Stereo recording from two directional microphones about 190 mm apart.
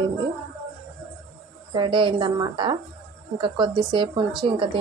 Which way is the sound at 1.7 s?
25° right (ahead or behind).